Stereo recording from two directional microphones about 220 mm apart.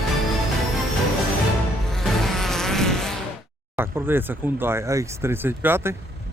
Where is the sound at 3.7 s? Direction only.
10° right (ahead or behind).